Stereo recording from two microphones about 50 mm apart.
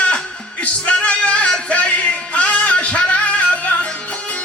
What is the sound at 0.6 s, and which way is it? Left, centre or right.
Music, left.